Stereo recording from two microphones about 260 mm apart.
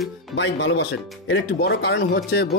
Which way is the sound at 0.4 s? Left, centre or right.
Left.